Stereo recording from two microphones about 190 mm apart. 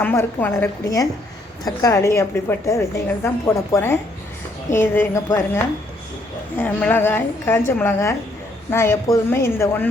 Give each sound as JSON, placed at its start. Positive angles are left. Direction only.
{"t": 0.0, "sound": "speech", "side_deg": 10}